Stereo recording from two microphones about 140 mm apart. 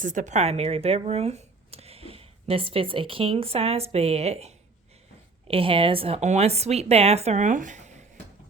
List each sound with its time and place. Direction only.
0.0 s a woman's voice: 65° right (ahead or behind)